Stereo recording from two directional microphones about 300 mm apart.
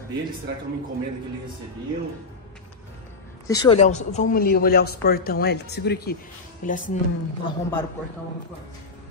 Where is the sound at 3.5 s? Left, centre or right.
Centre.